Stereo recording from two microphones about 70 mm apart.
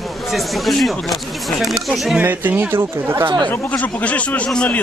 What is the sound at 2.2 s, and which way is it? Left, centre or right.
Speech, right.